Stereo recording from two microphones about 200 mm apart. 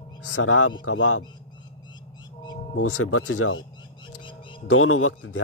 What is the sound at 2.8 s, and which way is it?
Speech, 90° left.